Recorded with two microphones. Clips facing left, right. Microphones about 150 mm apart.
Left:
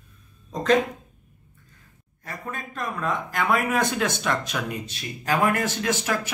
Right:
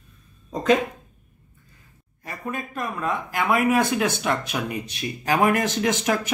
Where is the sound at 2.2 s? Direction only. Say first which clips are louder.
Right 3 dB; 10° right (ahead or behind).